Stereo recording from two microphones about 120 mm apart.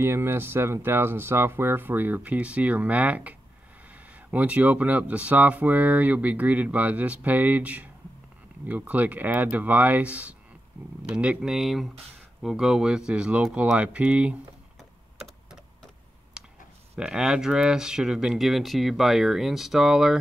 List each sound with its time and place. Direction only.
0.0 s speech: 20° right (ahead or behind)
15.2 s typing: centre (ahead or behind)
16.4 s a sound: 5° right (ahead or behind)
17.0 s speech: 5° right (ahead or behind)